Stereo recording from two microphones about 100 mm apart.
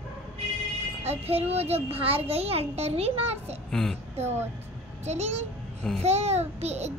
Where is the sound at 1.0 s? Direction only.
90° right.